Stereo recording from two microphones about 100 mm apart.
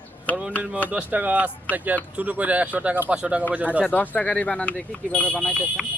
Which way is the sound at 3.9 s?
15° left (ahead or behind).